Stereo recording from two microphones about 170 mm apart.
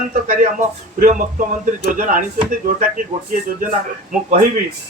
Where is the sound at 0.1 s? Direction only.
50° right (ahead or behind).